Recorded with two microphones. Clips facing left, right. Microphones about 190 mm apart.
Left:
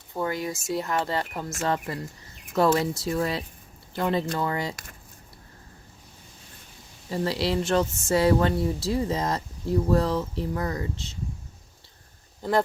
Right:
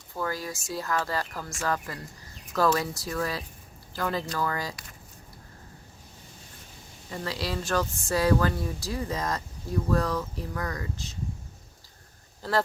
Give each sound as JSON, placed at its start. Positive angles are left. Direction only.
{"t": 0.1, "sound": "speech", "side_deg": 20}
{"t": 7.1, "sound": "speech", "side_deg": 25}
{"t": 12.4, "sound": "speech", "side_deg": 20}